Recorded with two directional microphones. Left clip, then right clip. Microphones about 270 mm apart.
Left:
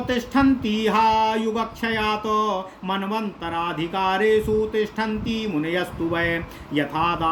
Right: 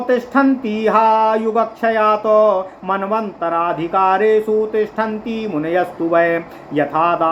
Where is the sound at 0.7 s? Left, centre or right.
Left.